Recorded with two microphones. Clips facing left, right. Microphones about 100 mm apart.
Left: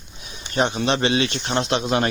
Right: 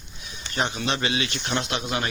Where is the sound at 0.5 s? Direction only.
25° left (ahead or behind).